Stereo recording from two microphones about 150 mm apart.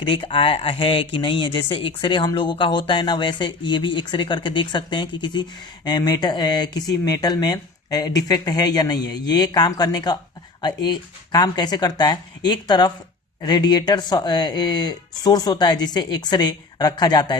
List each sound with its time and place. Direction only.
0.0 s speech: 30° left (ahead or behind)